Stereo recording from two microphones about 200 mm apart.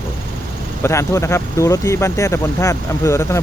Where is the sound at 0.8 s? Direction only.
15° left (ahead or behind).